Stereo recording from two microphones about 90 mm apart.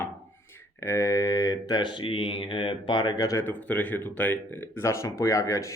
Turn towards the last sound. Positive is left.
turn(degrees=35)  # may be behind; listen again after turning